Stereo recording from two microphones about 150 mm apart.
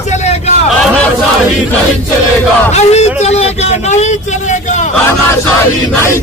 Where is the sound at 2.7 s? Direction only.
45° left (ahead or behind).